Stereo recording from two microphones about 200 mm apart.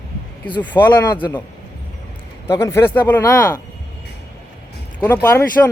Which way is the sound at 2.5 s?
15° left (ahead or behind).